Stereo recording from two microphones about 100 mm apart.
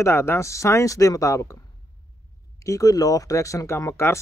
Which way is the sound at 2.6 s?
35° left (ahead or behind).